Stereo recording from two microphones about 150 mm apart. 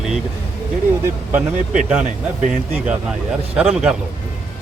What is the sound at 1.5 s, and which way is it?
Speech, 55° right (ahead or behind).